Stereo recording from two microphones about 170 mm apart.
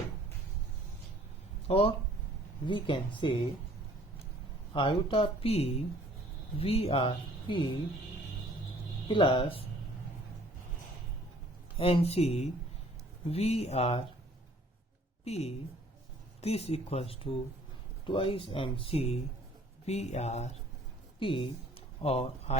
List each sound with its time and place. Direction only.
1.6 s speech: 35° left (ahead or behind)
4.7 s speech: 30° left (ahead or behind)
9.0 s speech: 30° left (ahead or behind)
11.8 s speech: 35° left (ahead or behind)
15.2 s a woman's voice: 40° left (ahead or behind)